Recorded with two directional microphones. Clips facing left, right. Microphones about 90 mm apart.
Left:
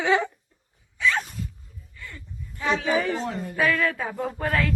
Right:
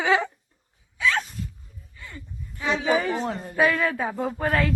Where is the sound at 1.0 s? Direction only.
Centre (ahead or behind).